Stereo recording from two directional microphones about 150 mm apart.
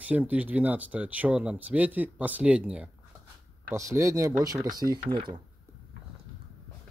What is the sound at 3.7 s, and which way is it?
Speech, 20° right (ahead or behind).